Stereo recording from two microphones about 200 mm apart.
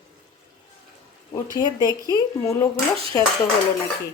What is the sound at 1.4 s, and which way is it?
Speech, 20° left (ahead or behind).